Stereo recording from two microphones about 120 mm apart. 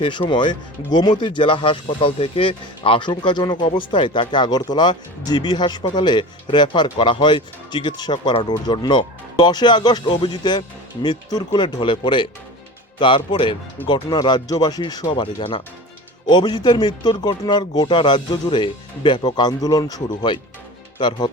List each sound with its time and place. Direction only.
0.0 s speech: 40° left (ahead or behind)
15.1 s speech: 50° left (ahead or behind)